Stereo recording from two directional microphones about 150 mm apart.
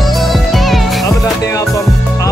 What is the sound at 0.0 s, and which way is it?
Music, centre (ahead or behind).